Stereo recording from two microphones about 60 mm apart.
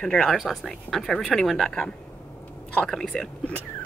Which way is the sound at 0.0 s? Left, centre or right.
Centre.